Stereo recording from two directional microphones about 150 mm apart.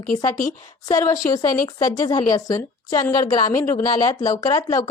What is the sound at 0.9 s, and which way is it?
A woman's voice, 25° left (ahead or behind).